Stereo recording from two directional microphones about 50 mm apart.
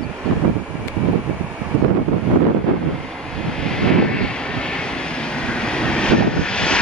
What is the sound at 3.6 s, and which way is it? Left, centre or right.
Vehicle, centre.